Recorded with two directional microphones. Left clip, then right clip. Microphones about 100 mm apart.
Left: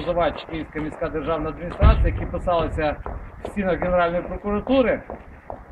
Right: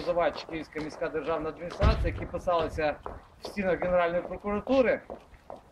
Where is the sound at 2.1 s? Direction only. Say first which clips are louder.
Left 6 dB; 40° right (ahead or behind).